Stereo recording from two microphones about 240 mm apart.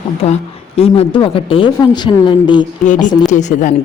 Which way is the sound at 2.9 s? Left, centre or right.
Left.